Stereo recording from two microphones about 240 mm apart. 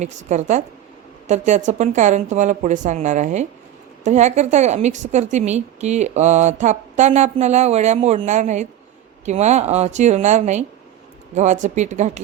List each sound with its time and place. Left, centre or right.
0.0 s a woman's voice: right